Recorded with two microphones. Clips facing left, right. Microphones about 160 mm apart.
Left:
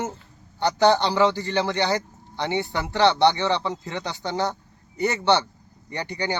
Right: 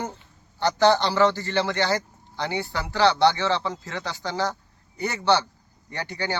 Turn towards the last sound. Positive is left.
turn(degrees=15)  # may be behind; listen again after turning